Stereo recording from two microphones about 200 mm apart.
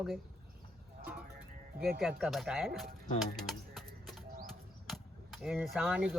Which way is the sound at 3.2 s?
Centre (ahead or behind).